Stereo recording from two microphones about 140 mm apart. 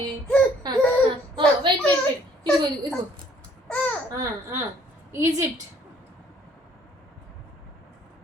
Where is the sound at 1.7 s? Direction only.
35° right (ahead or behind).